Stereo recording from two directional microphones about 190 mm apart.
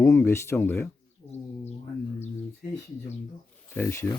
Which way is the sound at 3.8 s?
10° left (ahead or behind).